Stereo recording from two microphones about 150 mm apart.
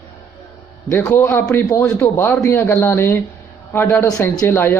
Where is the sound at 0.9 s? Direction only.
15° left (ahead or behind).